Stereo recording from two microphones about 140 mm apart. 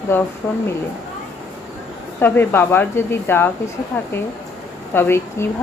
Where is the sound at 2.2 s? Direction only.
15° left (ahead or behind).